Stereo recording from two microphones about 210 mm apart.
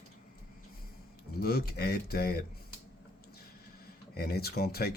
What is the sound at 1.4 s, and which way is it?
Speech, 45° left (ahead or behind).